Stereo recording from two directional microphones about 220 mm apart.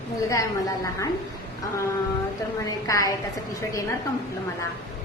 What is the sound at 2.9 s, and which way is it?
Speech, 15° left (ahead or behind).